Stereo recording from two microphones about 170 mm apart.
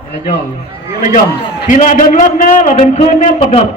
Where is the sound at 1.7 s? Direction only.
50° left (ahead or behind).